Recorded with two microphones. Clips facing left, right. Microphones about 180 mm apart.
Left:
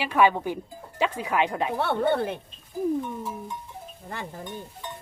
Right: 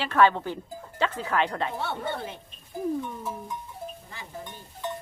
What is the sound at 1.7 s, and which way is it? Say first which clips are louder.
Speech: left 8 dB; 60° left (ahead or behind).